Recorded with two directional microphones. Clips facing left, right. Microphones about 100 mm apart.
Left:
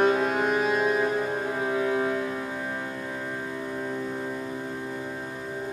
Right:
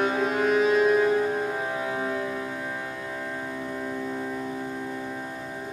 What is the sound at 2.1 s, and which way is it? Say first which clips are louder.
Music: even; 15° left (ahead or behind).